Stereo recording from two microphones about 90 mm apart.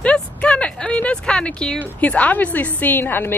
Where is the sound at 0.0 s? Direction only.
15° left (ahead or behind).